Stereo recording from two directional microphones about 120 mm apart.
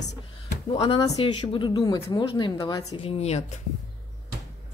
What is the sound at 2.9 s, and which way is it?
Speech, 55° left (ahead or behind).